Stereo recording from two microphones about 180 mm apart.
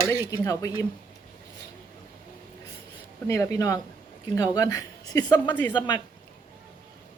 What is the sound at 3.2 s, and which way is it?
Speech, 15° left (ahead or behind).